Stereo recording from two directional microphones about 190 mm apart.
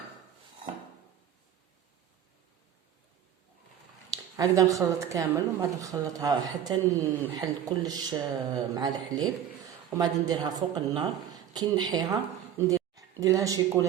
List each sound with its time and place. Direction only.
4.1 s a woman's voice: 20° right (ahead or behind)